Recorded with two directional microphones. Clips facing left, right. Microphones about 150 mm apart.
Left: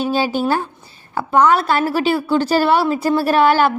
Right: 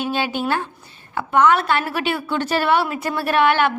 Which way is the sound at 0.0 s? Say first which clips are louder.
Left 4 dB; 35° left (ahead or behind).